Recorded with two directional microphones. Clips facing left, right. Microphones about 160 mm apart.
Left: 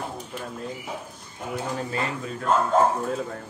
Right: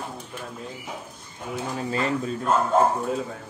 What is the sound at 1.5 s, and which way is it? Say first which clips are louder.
Speech: right 1 dB; 25° right (ahead or behind).